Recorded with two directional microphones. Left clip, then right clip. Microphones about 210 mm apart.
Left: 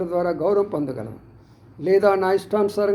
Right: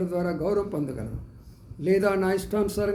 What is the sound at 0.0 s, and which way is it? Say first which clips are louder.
A man's voice: left 6 dB; 10° right (ahead or behind).